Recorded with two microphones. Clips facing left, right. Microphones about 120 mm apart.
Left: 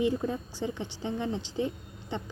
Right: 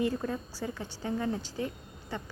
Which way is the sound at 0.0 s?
15° left (ahead or behind).